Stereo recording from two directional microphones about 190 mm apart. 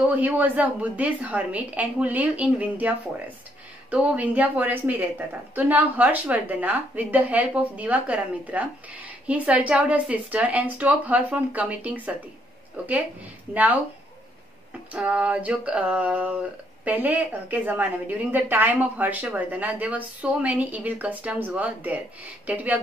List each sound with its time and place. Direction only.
0.0 s a woman's voice: 10° right (ahead or behind)
3.9 s a woman's voice: 5° right (ahead or behind)
13.5 s a woman's voice: 10° right (ahead or behind)
14.9 s a woman's voice: 5° right (ahead or behind)